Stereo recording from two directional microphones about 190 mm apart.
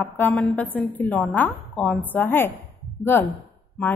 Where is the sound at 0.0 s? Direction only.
5° left (ahead or behind).